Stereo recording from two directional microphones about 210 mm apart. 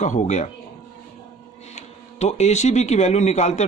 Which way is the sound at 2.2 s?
30° left (ahead or behind).